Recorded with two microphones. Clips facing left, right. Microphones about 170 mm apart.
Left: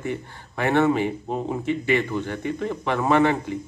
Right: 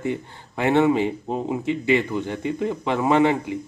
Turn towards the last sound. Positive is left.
turn(degrees=-15)  # may be behind; listen again after turning